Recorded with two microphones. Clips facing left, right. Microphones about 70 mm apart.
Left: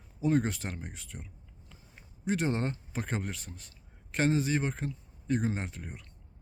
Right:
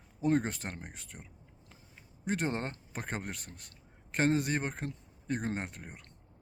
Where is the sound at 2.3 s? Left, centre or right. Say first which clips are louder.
Left 3 dB; right.